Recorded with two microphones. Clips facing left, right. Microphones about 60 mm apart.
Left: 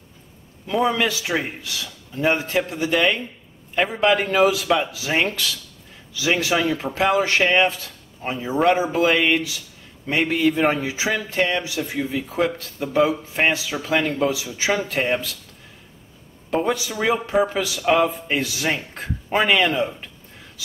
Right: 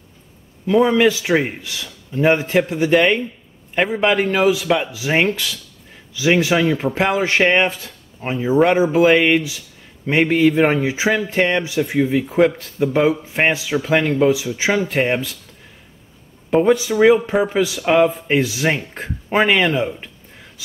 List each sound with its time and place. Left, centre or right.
0.7 s speech: centre
16.4 s speech: centre